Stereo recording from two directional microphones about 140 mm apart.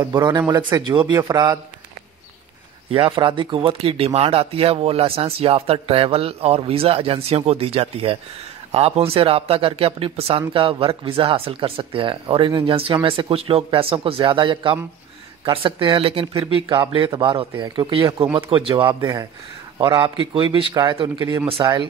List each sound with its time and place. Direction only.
0.0 s a man's voice: 30° right (ahead or behind)
2.9 s a man's voice: 40° right (ahead or behind)